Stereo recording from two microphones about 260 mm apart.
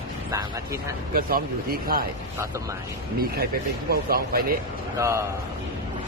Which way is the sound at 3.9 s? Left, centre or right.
Right.